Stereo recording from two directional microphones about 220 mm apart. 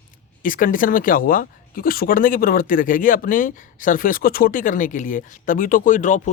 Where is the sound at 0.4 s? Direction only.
40° left (ahead or behind).